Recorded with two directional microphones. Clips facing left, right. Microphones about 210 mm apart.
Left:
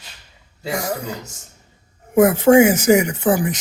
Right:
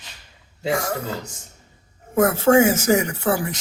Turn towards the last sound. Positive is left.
turn(degrees=15)  # may be behind; listen again after turning